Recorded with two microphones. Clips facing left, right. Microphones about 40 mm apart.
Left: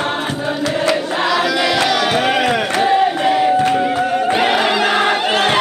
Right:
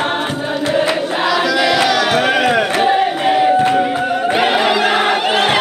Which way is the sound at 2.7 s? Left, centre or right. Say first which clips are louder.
Even; right.